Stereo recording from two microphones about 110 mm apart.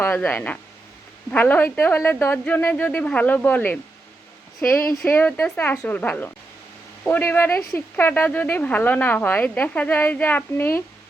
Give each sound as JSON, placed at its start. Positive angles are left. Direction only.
{"t": 0.0, "sound": "speech", "side_deg": 20}